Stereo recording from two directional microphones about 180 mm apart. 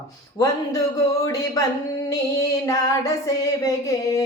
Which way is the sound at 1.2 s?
20° left (ahead or behind).